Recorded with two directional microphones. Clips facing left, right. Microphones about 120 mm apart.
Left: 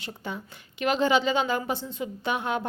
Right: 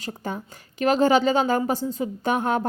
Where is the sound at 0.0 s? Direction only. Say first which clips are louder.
Right 5 dB; 40° right (ahead or behind).